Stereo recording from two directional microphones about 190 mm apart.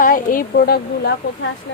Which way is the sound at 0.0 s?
45° left (ahead or behind).